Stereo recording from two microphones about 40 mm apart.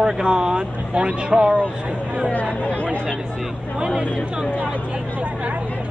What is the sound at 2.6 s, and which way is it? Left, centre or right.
Chatter, left.